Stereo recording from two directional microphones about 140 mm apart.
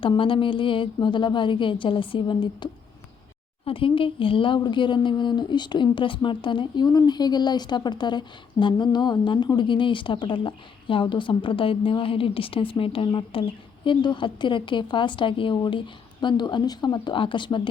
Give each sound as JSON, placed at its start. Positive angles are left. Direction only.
{"t": 0.0, "sound": "speech", "side_deg": 40}
{"t": 3.7, "sound": "speech", "side_deg": 40}